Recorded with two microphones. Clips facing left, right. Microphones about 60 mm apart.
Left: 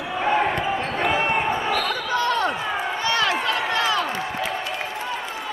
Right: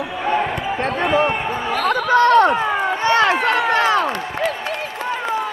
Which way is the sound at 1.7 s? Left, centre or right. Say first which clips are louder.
Right 7 dB; right.